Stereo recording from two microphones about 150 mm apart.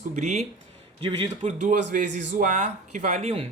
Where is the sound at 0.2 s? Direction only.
50° right (ahead or behind).